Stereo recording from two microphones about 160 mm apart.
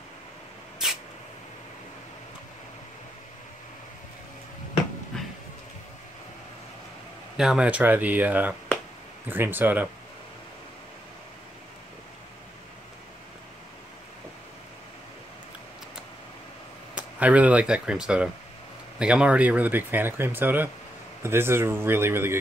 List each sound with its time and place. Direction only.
5.1 s a sound: 5° left (ahead or behind)
7.3 s speech: 5° right (ahead or behind)
16.9 s speech: 10° right (ahead or behind)